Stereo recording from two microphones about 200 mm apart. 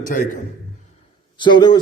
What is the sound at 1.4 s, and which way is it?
Speech, 20° left (ahead or behind).